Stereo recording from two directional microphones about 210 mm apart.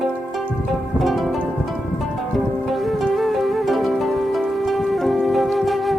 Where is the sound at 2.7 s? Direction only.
Centre (ahead or behind).